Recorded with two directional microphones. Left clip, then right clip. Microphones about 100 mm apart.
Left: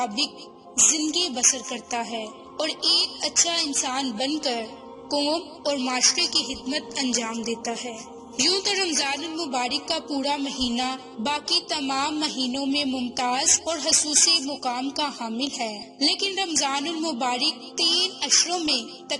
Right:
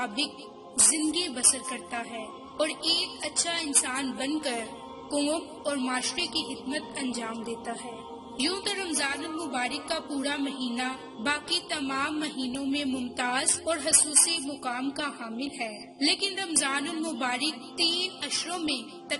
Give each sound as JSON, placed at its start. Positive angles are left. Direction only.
{"t": 1.1, "sound": "a woman's voice", "side_deg": 55}
{"t": 5.9, "sound": "a woman's voice", "side_deg": 75}